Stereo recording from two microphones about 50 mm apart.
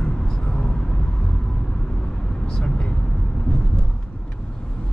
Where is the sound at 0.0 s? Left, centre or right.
Centre.